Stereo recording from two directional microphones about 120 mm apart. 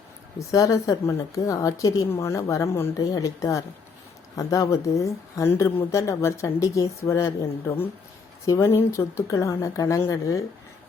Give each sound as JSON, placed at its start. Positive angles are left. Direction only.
{"t": 0.3, "sound": "a woman's voice", "side_deg": 30}
{"t": 8.4, "sound": "a woman's voice", "side_deg": 25}